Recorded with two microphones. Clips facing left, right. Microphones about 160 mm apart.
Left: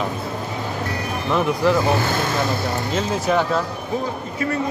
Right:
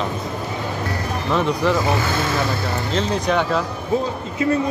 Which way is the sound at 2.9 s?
5° left (ahead or behind).